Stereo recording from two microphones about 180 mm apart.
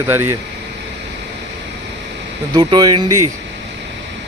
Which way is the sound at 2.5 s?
20° right (ahead or behind).